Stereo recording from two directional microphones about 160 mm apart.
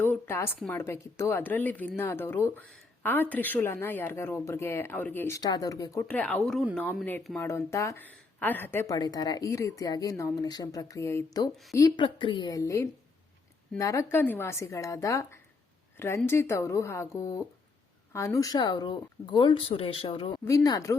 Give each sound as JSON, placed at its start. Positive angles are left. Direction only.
{"t": 0.0, "sound": "a woman's voice", "side_deg": 15}
{"t": 6.1, "sound": "speech", "side_deg": 10}